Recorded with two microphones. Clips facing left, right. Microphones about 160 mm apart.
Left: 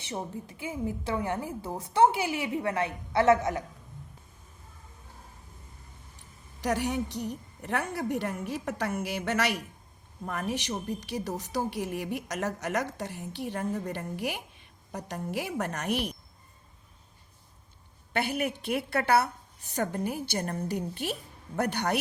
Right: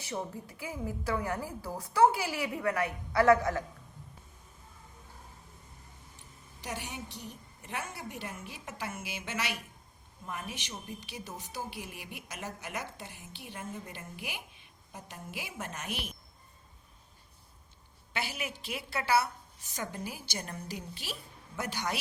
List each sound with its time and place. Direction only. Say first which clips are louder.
0.0 s a woman's voice: left 2 dB; 25° left (ahead or behind)
6.6 s a woman's voice: left 12 dB; 65° left (ahead or behind)
18.1 s a woman's voice: left 8 dB; 55° left (ahead or behind)